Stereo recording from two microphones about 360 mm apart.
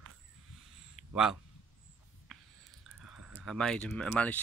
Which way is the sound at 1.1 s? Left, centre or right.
Centre.